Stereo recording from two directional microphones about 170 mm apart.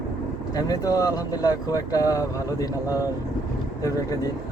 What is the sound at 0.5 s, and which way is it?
Speech, 20° left (ahead or behind).